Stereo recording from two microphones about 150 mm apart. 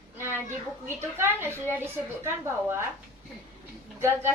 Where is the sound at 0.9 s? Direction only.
15° right (ahead or behind).